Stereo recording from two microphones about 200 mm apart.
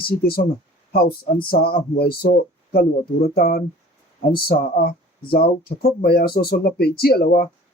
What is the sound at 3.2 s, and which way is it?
Speech, 50° left (ahead or behind).